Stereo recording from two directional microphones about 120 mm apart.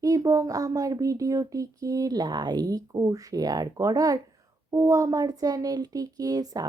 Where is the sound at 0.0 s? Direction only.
30° right (ahead or behind).